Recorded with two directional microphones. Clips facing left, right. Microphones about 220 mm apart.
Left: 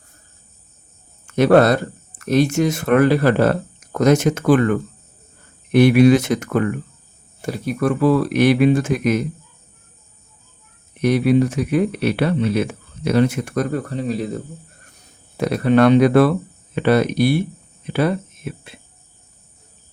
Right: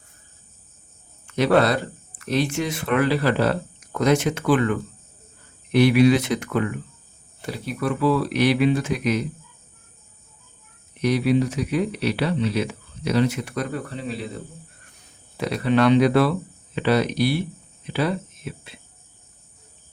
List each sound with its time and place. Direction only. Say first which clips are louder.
1.3 s speech: left 6 dB; 50° left (ahead or behind)
10.9 s speech: left 4 dB; 55° left (ahead or behind)